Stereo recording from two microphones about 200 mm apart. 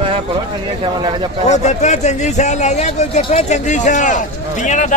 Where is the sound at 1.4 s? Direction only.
35° left (ahead or behind).